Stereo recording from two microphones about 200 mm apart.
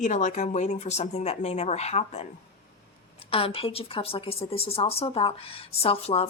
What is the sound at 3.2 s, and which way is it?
Speech, 25° left (ahead or behind).